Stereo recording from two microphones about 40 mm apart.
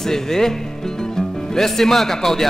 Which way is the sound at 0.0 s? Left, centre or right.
Centre.